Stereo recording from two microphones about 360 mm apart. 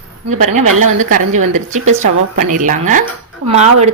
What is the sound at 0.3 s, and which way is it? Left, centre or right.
Speech, centre.